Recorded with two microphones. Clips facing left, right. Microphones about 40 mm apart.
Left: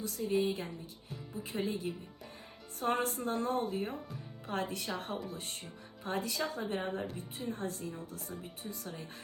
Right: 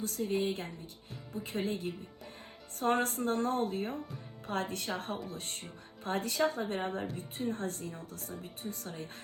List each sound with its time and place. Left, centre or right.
0.0 s speech: right